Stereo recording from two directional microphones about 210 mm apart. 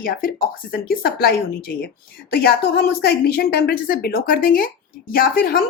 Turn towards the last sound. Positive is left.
turn(degrees=45)  # may be behind; listen again after turning